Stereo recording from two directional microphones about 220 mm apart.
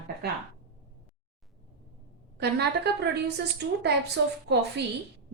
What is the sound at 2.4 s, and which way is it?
Speech, 50° right (ahead or behind).